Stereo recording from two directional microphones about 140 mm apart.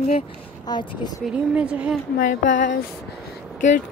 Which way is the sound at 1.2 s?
5° right (ahead or behind).